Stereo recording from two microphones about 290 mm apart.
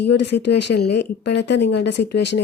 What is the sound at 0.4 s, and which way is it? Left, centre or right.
Speech, left.